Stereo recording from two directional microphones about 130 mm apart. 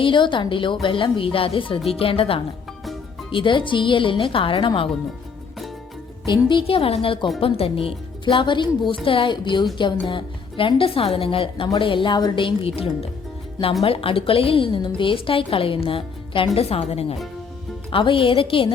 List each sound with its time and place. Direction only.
0.0 s a woman's voice: 40° left (ahead or behind)
6.2 s a woman's voice: 35° left (ahead or behind)